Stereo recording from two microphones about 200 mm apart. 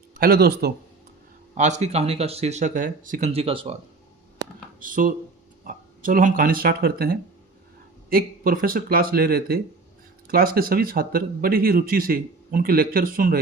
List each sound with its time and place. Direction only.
0.1 s speech: 45° right (ahead or behind)
1.5 s speech: 35° right (ahead or behind)
4.8 s speech: 45° right (ahead or behind)